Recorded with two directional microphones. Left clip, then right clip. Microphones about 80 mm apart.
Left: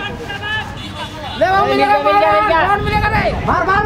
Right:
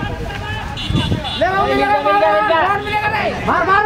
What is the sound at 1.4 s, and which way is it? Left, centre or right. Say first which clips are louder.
Speech: left 3 dB; left.